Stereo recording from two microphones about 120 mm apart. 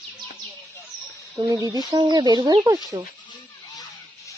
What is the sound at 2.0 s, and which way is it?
Speech, 35° right (ahead or behind).